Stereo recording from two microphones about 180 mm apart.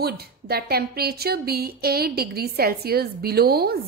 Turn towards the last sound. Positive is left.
turn(degrees=-60)  # may be behind; listen again after turning